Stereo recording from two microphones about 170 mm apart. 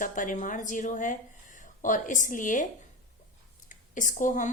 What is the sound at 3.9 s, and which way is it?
Speech, 50° left (ahead or behind).